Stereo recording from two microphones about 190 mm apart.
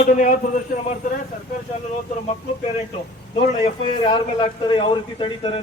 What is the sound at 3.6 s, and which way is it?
A man's voice, 25° left (ahead or behind).